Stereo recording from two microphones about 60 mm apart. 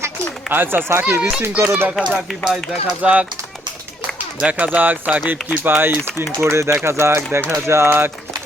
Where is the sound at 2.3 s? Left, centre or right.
Centre.